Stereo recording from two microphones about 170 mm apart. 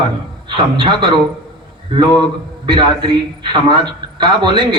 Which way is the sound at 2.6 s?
25° right (ahead or behind).